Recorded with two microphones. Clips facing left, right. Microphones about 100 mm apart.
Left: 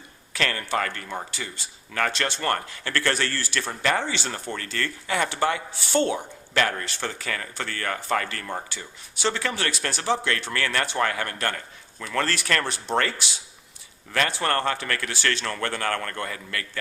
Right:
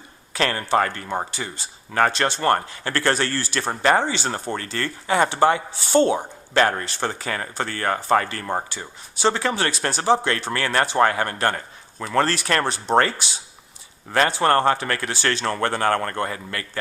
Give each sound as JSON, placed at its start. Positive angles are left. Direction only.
{"t": 0.3, "sound": "speech", "side_deg": -30}